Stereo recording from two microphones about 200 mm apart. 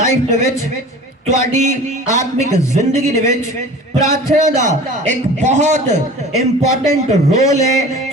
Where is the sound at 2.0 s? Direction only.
15° left (ahead or behind).